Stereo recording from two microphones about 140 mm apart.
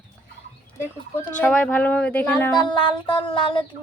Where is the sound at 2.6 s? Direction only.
35° left (ahead or behind).